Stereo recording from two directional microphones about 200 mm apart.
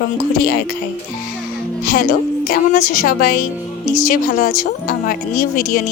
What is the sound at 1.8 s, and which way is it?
Speech, 45° left (ahead or behind).